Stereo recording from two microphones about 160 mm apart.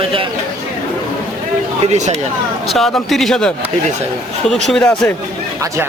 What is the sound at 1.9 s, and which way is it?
Speech, 45° right (ahead or behind).